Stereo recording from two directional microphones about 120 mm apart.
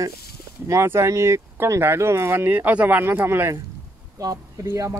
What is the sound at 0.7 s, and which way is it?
Speech, 25° right (ahead or behind).